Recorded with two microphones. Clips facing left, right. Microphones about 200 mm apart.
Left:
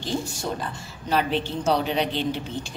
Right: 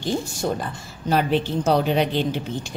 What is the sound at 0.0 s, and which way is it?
A woman's voice, 50° right (ahead or behind).